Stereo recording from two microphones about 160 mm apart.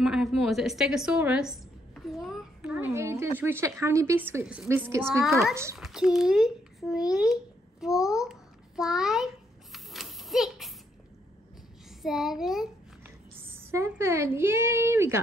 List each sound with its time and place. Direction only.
0.0 s a woman's voice: centre (ahead or behind)
2.0 s a sound: centre (ahead or behind); by 3.3 s 15° right (ahead or behind)
3.3 s a woman's voice: 15° right (ahead or behind)
5.2 s a woman's voice: centre (ahead or behind)
5.5 s a woman's voice: 15° right (ahead or behind)
5.8 s babbling: centre (ahead or behind)
12.0 s a woman's voice: centre (ahead or behind)
13.0 s speech: 15° right (ahead or behind)